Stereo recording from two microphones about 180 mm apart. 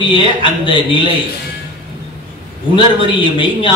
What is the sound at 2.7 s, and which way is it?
A man's voice, 25° left (ahead or behind).